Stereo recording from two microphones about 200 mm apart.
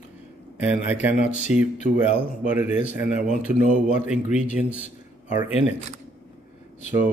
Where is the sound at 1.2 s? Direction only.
40° left (ahead or behind).